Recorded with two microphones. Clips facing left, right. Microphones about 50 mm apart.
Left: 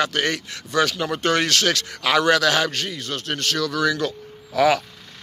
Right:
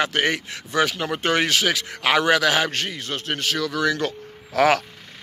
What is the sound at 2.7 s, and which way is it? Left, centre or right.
Speech, right.